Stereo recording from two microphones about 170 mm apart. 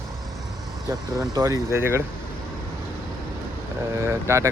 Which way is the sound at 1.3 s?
20° right (ahead or behind).